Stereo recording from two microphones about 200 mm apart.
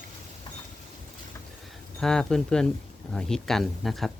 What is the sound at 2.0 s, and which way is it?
Speech, 5° left (ahead or behind).